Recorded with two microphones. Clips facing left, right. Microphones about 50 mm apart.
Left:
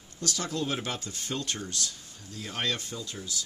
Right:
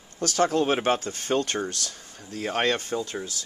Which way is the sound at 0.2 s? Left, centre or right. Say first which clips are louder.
Right 10 dB; right.